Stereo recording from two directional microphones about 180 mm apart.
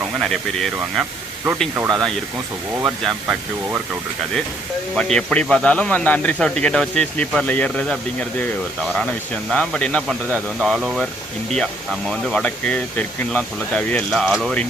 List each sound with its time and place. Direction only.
0.2 s a man's voice: centre (ahead or behind)
1.7 s speech: 20° right (ahead or behind)
2.8 s speech: 5° right (ahead or behind)
4.9 s a man's voice: 5° left (ahead or behind)
9.5 s a man's voice: 5° left (ahead or behind)